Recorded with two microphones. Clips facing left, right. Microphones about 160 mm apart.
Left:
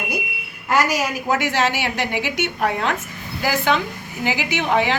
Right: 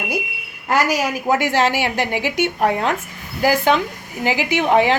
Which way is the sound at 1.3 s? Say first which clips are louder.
Right 3 dB; 45° right (ahead or behind).